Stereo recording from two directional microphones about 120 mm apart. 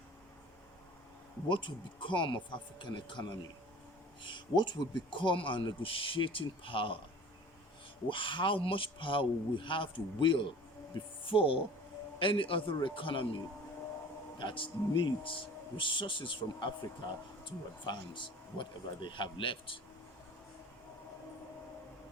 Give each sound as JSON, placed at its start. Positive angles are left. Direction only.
{"t": 1.5, "sound": "speech", "side_deg": 40}
{"t": 8.0, "sound": "speech", "side_deg": 45}
{"t": 14.3, "sound": "speech", "side_deg": 45}